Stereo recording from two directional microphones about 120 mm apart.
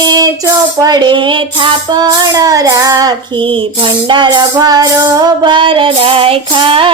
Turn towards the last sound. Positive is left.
turn(degrees=-45)  # may be behind; listen again after turning